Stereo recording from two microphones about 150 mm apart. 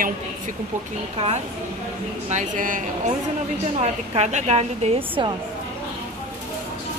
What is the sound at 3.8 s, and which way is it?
A woman's voice, 50° right (ahead or behind).